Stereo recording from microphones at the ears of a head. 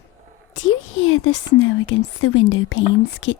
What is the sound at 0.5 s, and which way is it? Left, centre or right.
Speech, left.